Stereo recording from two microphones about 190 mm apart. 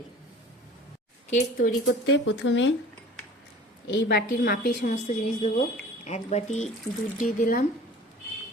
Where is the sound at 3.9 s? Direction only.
65° left (ahead or behind); by 7.6 s 45° left (ahead or behind).